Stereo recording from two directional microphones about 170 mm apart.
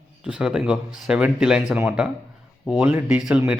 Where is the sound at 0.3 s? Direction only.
5° right (ahead or behind).